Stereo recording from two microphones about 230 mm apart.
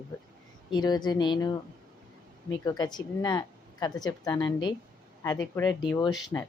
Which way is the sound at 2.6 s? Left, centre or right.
Centre.